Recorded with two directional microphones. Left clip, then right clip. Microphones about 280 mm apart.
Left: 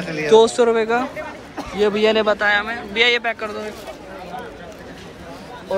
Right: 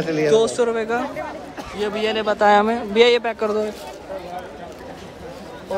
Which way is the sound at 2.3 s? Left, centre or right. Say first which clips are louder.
Right 3 dB; centre.